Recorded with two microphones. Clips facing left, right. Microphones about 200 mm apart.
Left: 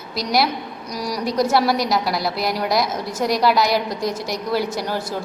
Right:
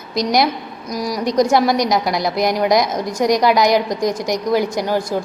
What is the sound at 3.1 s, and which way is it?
A woman's voice, 15° right (ahead or behind).